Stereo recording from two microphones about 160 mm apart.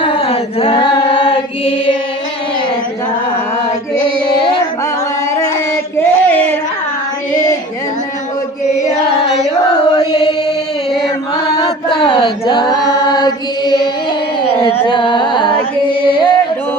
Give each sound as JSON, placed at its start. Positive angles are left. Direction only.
{"t": 0.0, "sound": "chant", "side_deg": 35}
{"t": 6.0, "sound": "a sound", "side_deg": 10}
{"t": 11.5, "sound": "choir", "side_deg": 30}
{"t": 14.6, "sound": "carnatic music", "side_deg": 30}
{"t": 16.0, "sound": "singing", "side_deg": 30}